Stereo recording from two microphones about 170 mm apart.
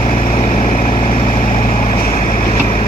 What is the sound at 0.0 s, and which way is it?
Vehicle, 35° left (ahead or behind).